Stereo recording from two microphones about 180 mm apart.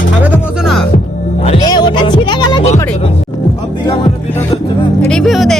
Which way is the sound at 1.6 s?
25° left (ahead or behind).